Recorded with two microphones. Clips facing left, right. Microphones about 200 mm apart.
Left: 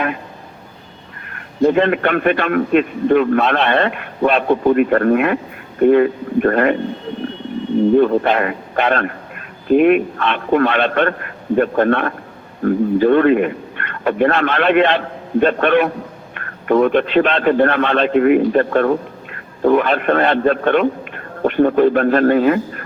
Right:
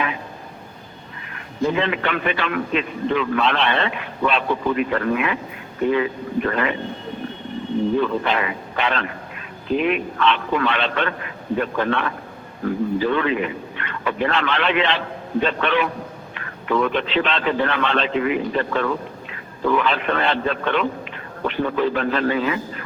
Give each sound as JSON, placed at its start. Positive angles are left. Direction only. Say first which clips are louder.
{"t": 1.3, "sound": "a man's voice", "louder": "left 8 dB", "side_deg": 50}
{"t": 7.9, "sound": "a man's voice", "louder": "left 8 dB", "side_deg": 50}